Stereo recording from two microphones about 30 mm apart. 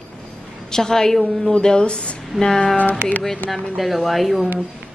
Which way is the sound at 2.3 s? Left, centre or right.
Right.